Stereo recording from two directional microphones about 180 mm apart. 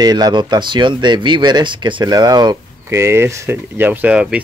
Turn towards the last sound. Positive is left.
turn(degrees=-5)  # may be behind; listen again after turning